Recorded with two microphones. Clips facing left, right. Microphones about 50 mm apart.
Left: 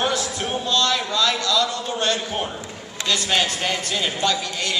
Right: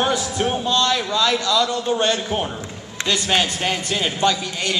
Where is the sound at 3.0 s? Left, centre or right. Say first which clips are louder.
Right 2 dB; right.